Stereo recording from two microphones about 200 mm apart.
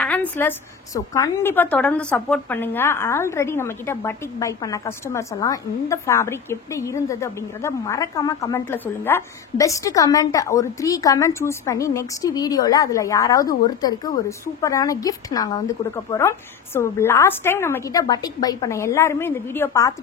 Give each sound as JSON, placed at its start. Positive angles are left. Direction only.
{"t": 0.0, "sound": "a woman's voice", "side_deg": 10}